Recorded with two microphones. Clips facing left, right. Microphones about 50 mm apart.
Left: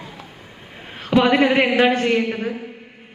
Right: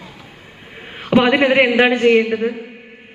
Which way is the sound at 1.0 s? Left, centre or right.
Right.